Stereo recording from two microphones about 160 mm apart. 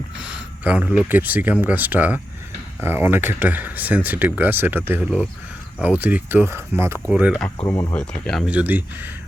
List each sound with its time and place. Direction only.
0.2 s speech: 5° right (ahead or behind)
7.7 s speech: 20° left (ahead or behind)
7.9 s speech: 5° left (ahead or behind)
8.4 s speech: 10° right (ahead or behind)